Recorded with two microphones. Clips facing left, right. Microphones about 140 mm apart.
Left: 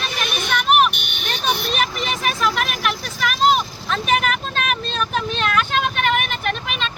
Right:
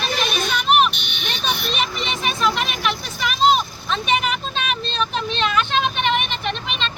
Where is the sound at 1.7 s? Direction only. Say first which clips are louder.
Left 2 dB; 5° left (ahead or behind).